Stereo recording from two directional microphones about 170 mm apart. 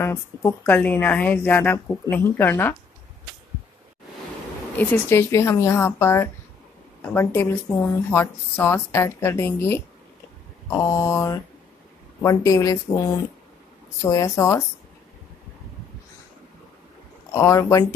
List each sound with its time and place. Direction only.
0.0 s speech: 15° left (ahead or behind)
4.7 s speech: 15° left (ahead or behind)
14.0 s speech: 20° left (ahead or behind)
17.3 s speech: 20° left (ahead or behind)